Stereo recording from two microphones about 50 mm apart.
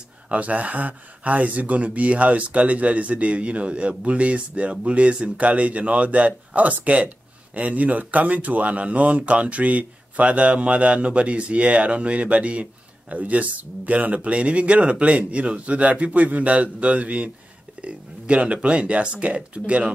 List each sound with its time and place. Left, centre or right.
0.3 s speech: right